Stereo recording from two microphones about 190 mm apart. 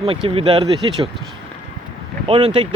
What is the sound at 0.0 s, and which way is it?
Speech, 30° right (ahead or behind).